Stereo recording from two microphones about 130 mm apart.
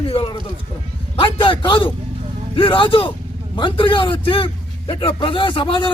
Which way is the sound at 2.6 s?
40° left (ahead or behind).